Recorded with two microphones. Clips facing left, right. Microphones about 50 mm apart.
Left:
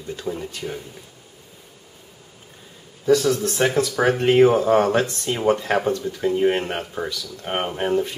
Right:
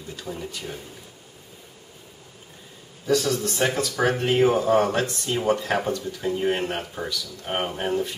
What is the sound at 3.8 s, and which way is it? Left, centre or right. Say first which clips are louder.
Speech: left 4 dB; centre.